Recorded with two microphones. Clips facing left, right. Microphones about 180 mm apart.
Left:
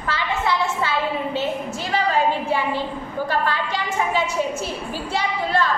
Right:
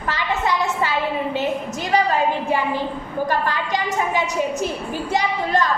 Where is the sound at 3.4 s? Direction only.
15° right (ahead or behind).